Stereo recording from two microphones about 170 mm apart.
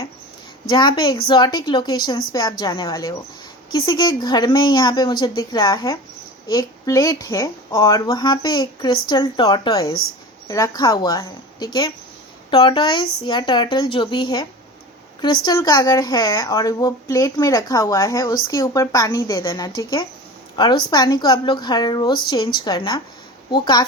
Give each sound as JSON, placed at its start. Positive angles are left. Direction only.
{"t": 0.7, "sound": "speech", "side_deg": 25}